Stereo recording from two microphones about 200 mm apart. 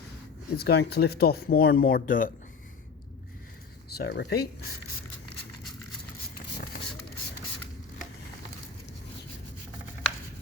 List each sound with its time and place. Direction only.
0.5 s speech: 55° left (ahead or behind)
3.8 s speech: 50° left (ahead or behind)